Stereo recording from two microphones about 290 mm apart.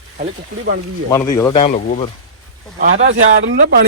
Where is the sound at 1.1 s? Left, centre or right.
Centre.